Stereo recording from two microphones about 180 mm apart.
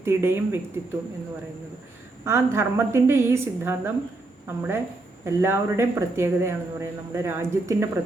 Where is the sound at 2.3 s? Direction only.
15° right (ahead or behind).